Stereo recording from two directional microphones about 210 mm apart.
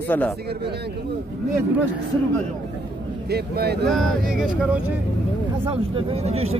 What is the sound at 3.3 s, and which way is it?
Speech, 50° right (ahead or behind).